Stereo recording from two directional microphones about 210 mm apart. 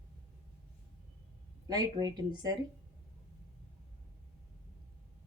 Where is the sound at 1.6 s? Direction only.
20° right (ahead or behind).